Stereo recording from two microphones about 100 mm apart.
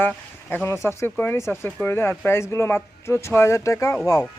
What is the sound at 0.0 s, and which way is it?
Speech, 15° left (ahead or behind).